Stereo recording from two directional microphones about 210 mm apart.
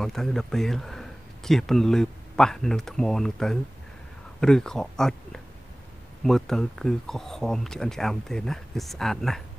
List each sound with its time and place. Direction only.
0.0 s speech: centre (ahead or behind)